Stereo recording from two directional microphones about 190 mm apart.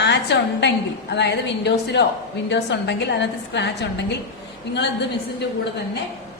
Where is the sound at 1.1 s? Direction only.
65° left (ahead or behind).